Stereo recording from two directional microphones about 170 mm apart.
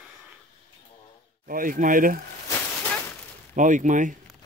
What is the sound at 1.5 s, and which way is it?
Speech, 55° right (ahead or behind).